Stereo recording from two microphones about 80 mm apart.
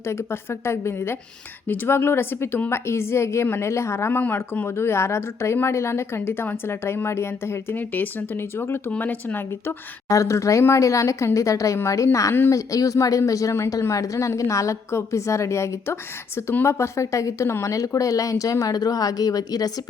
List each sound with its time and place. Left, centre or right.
0.0 s a woman's voice: left
8.9 s speech: left
10.1 s a woman's voice: left